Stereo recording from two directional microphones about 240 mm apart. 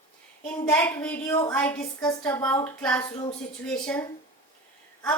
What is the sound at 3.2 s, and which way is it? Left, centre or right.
Speech, left.